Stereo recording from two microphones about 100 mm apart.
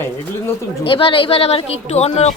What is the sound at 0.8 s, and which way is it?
Speech, 60° left (ahead or behind).